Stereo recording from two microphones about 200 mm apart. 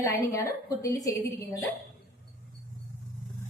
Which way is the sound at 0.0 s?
15° left (ahead or behind).